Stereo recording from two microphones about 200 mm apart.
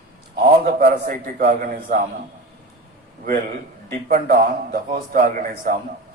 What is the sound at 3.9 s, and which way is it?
A man's voice, 45° right (ahead or behind).